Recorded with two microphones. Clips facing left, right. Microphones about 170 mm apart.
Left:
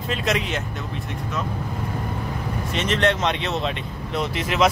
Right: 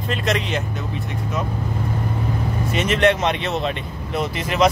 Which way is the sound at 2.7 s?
10° right (ahead or behind).